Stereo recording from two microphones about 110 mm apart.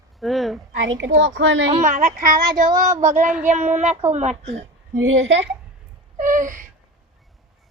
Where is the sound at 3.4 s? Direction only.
90° right.